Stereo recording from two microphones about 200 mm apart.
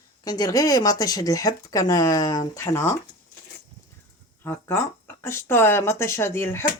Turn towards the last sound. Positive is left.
turn(degrees=10)  # may be behind; listen again after turning